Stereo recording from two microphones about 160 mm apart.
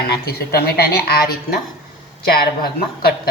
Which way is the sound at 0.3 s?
75° left (ahead or behind).